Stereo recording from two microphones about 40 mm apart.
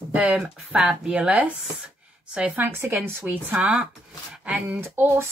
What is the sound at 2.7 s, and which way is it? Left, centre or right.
Speech, right.